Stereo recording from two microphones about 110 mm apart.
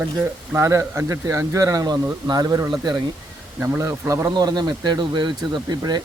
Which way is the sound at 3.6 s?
20° right (ahead or behind).